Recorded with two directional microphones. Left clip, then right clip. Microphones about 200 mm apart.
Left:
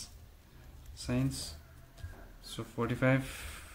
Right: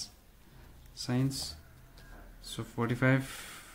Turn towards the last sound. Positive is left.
turn(degrees=-25)  # may be behind; listen again after turning